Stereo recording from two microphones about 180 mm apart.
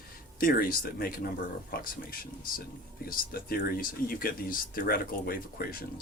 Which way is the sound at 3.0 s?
55° left (ahead or behind).